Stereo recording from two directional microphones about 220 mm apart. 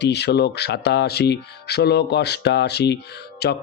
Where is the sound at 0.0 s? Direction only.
50° left (ahead or behind).